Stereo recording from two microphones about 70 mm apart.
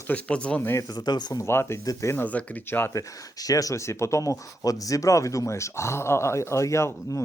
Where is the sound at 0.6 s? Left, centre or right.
Left.